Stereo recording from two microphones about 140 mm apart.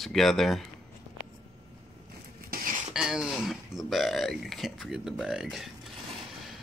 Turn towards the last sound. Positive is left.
turn(degrees=-5)  # may be behind; listen again after turning